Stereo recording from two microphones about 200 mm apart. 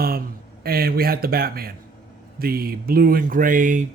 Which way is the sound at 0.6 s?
50° right (ahead or behind).